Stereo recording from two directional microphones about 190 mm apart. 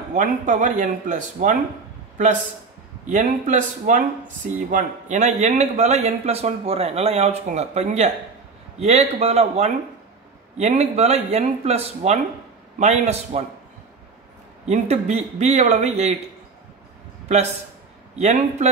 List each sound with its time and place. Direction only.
0.1 s a man's voice: 40° right (ahead or behind)
3.1 s a man's voice: 40° right (ahead or behind)
14.7 s a man's voice: 35° right (ahead or behind)
18.1 s a man's voice: 35° right (ahead or behind)